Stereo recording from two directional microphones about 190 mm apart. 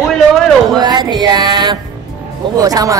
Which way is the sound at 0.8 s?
20° right (ahead or behind).